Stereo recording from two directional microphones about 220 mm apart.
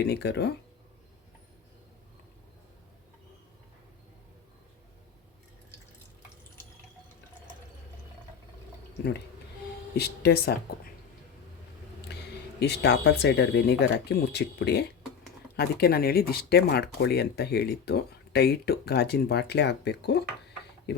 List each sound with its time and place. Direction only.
0.0 s speech: 50° left (ahead or behind)
9.9 s speech: 45° left (ahead or behind)
12.1 s a sound: 50° left (ahead or behind)
12.5 s speech: 50° left (ahead or behind)